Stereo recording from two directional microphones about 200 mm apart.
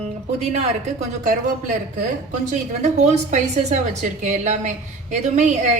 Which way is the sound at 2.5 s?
35° right (ahead or behind).